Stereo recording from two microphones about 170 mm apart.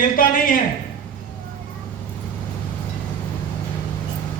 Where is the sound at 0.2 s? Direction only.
55° left (ahead or behind).